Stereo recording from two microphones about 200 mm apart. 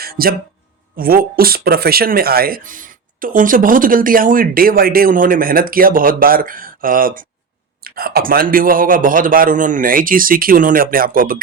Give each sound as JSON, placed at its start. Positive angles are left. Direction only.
{"t": 0.0, "sound": "music", "side_deg": -50}
{"t": 0.9, "sound": "speech", "side_deg": -45}